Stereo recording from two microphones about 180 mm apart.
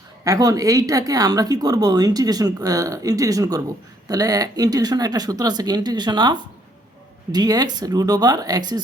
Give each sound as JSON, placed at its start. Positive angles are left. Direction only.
{"t": 0.3, "sound": "speech", "side_deg": -20}